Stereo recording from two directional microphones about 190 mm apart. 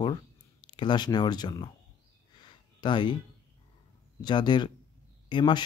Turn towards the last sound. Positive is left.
turn(degrees=25)  # may be behind; listen again after turning